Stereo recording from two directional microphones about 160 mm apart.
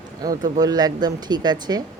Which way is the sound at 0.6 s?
25° right (ahead or behind).